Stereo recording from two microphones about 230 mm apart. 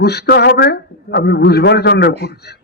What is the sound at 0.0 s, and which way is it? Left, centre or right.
A man's voice, left.